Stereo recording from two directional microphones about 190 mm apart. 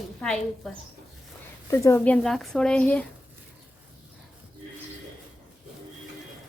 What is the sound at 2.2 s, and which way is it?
Speech, centre (ahead or behind).